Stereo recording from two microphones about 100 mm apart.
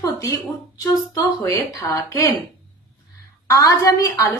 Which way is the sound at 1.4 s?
35° left (ahead or behind).